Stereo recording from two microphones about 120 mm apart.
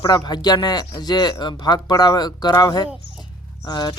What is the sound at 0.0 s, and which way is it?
Speech, 35° left (ahead or behind).